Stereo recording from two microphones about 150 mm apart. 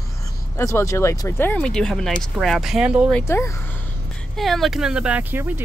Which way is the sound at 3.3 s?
15° left (ahead or behind).